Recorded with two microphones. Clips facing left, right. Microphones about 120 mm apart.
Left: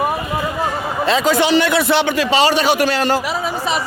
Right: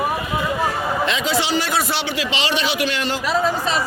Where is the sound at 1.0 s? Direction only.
40° left (ahead or behind).